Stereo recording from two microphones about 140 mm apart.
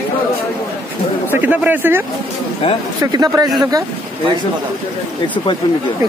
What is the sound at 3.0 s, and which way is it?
Speech, 25° right (ahead or behind).